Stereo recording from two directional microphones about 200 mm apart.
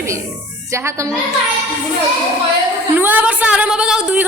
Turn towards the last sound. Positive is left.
turn(degrees=-5)  # may be behind; listen again after turning